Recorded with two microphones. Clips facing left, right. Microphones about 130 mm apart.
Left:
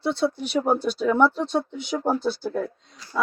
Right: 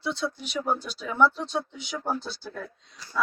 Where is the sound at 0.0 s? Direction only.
55° left (ahead or behind).